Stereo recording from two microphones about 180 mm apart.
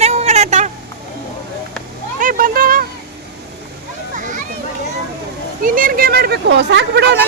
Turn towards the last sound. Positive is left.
turn(degrees=-70)  # may be behind; listen again after turning